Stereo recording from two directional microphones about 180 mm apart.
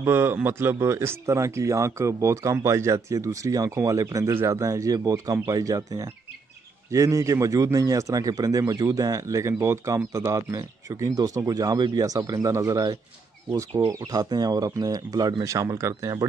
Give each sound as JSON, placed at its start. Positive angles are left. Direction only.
{"t": 0.0, "sound": "a man's voice", "side_deg": -10}